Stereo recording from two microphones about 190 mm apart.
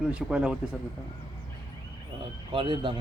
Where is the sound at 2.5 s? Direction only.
25° right (ahead or behind).